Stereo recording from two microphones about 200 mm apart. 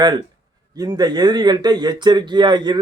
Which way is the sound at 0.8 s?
20° right (ahead or behind).